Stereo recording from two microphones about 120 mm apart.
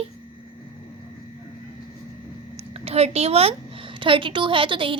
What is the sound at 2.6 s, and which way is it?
A woman's voice, 55° right (ahead or behind).